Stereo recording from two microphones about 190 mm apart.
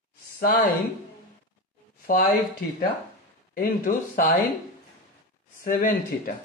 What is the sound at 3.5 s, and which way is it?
Speech, 50° left (ahead or behind).